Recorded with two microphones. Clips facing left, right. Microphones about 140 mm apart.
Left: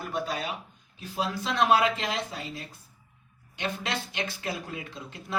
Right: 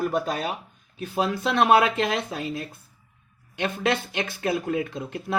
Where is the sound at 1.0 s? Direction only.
65° right (ahead or behind).